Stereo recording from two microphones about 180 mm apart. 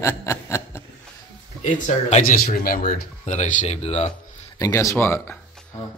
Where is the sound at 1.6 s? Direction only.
40° left (ahead or behind).